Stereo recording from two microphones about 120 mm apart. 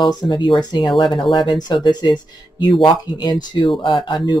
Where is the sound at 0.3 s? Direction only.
40° left (ahead or behind).